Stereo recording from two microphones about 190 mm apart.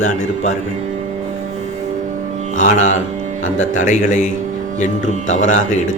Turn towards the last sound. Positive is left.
turn(degrees=40)  # may be behind; listen again after turning